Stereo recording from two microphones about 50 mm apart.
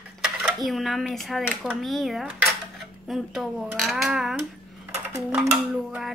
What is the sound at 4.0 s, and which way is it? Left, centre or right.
Speech, centre.